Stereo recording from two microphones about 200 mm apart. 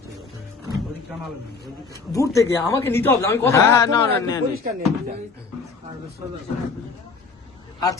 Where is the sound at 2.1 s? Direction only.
15° left (ahead or behind).